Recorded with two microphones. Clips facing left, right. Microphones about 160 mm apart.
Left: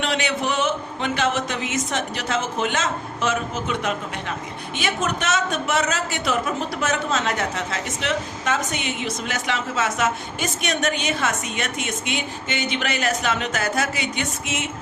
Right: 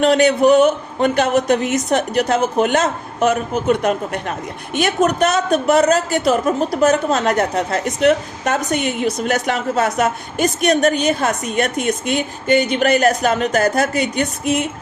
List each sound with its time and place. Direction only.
0.0 s a woman's voice: 40° right (ahead or behind)